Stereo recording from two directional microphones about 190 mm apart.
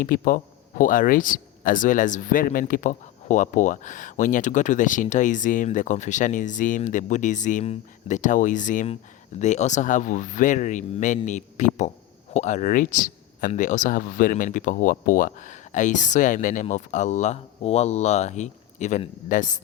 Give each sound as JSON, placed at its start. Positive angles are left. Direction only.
{"t": 0.0, "sound": "speech", "side_deg": 45}